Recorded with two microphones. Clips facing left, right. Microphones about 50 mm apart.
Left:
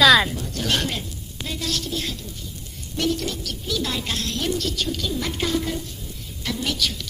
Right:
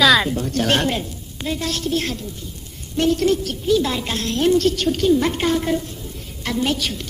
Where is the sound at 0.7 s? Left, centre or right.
Right.